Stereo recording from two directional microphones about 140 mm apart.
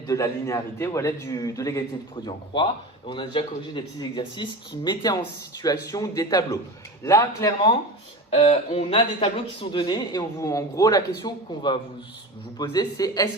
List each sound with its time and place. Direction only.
0.1 s a man's voice: 20° left (ahead or behind)
2.2 s a man's voice: 35° left (ahead or behind)
8.3 s a man's voice: 45° left (ahead or behind); by 13.3 s 30° left (ahead or behind)